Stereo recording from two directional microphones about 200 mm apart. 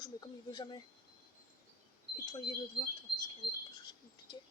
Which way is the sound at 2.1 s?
20° left (ahead or behind).